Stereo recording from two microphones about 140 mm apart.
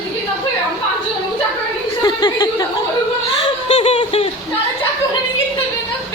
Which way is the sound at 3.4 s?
45° left (ahead or behind).